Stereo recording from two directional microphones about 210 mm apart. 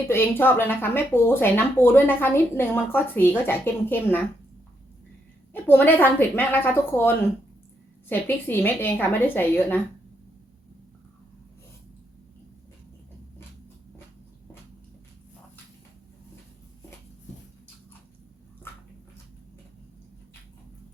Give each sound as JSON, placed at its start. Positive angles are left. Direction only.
{"t": 0.1, "sound": "speech", "side_deg": 10}
{"t": 5.6, "sound": "speech", "side_deg": 10}
{"t": 8.1, "sound": "speech", "side_deg": 10}